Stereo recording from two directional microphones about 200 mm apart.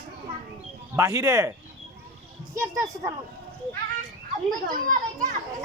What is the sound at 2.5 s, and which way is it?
Speech, 15° right (ahead or behind).